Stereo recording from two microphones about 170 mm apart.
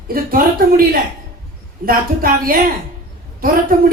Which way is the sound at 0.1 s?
55° right (ahead or behind).